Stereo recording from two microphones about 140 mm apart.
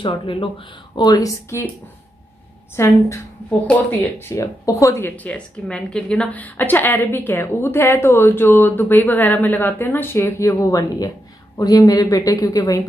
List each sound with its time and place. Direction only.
0.0 s speech: 40° left (ahead or behind); by 1.7 s 20° left (ahead or behind)
2.7 s a woman's voice: 20° left (ahead or behind)